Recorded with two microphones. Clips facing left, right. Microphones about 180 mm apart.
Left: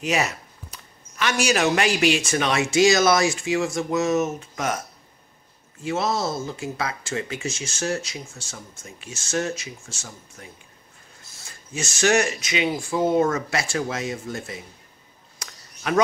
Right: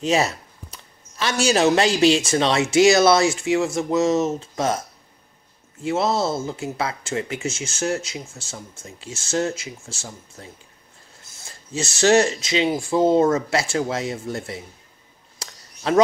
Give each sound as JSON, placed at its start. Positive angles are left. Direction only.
{"t": 0.0, "sound": "speech", "side_deg": -30}
{"t": 5.8, "sound": "speech", "side_deg": -25}
{"t": 11.7, "sound": "speech", "side_deg": -25}
{"t": 15.3, "sound": "a sound", "side_deg": -30}